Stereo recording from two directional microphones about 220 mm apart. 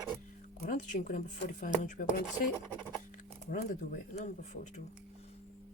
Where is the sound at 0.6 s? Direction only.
35° left (ahead or behind).